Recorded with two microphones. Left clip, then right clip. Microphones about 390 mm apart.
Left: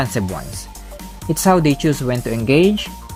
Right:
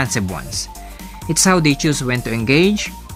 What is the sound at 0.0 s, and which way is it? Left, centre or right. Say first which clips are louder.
Speech: right 1 dB; centre.